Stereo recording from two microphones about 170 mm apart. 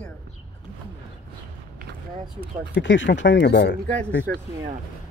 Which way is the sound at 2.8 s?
90° left.